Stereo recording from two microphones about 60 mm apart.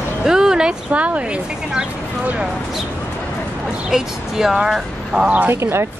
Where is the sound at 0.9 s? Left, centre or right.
Right.